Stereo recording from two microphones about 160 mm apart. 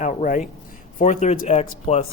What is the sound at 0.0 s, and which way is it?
Speech, 50° left (ahead or behind).